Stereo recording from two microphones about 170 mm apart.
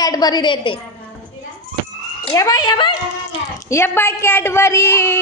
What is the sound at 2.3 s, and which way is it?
Speech, 20° left (ahead or behind).